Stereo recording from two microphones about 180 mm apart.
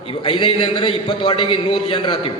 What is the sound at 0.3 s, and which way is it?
A man's voice, 30° left (ahead or behind).